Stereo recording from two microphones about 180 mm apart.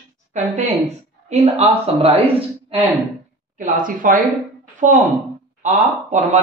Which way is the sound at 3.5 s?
50° right (ahead or behind).